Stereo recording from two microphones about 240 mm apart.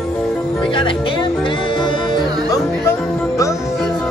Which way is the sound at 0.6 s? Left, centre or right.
Left.